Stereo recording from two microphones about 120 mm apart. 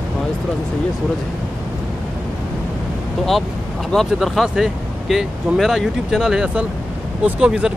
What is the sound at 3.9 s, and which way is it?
Speech, centre (ahead or behind).